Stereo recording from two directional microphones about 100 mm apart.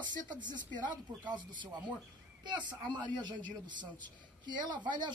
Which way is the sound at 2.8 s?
50° right (ahead or behind).